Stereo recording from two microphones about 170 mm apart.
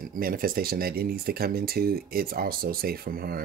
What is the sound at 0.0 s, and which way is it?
Speech, 55° right (ahead or behind).